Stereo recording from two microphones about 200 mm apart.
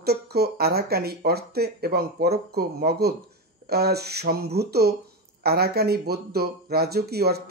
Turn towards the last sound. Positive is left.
turn(degrees=-50)  # may be behind; listen again after turning